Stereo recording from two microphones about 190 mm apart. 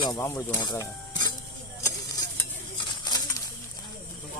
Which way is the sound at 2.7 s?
20° left (ahead or behind).